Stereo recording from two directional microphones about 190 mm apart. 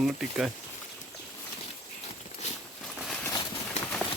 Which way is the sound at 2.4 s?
35° left (ahead or behind).